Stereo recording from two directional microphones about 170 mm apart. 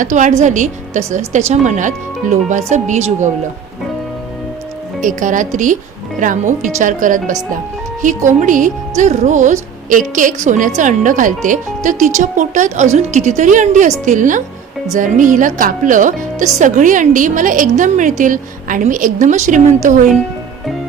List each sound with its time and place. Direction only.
0.0 s speech: 45° right (ahead or behind)
4.9 s speech: 50° right (ahead or behind)